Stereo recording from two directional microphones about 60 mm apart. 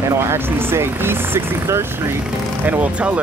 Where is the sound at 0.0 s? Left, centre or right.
Right.